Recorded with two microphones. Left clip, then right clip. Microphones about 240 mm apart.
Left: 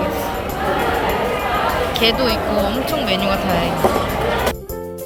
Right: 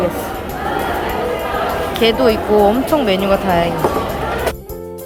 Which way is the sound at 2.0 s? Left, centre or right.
Centre.